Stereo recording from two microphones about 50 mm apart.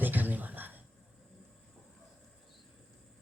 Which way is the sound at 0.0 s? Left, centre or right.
Right.